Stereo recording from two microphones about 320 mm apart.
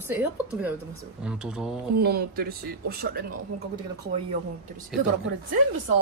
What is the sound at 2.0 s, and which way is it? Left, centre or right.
Speech, right.